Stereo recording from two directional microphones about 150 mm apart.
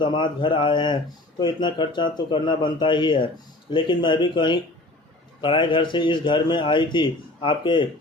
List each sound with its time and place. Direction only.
0.0 s a man's voice: 30° left (ahead or behind)